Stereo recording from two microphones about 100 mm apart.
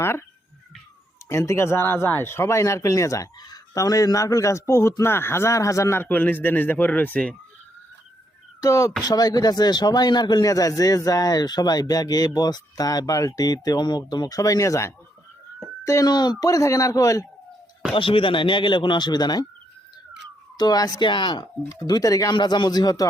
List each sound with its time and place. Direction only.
0.0 s speech: 25° left (ahead or behind)
1.3 s speech: 30° left (ahead or behind)
8.6 s speech: 35° left (ahead or behind)
17.9 s speech: 60° left (ahead or behind); by 19.5 s 40° left (ahead or behind)
20.6 s speech: 40° left (ahead or behind)
22.4 s speech: 50° left (ahead or behind)